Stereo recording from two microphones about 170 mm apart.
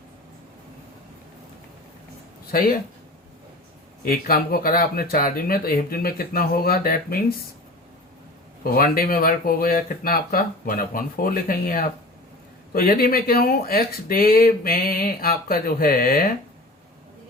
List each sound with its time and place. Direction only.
2.5 s speech: 60° left (ahead or behind)
4.0 s speech: 60° left (ahead or behind)
8.6 s speech: 60° left (ahead or behind)